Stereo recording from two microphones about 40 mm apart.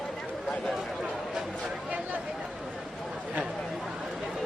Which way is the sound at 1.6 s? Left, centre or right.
Right.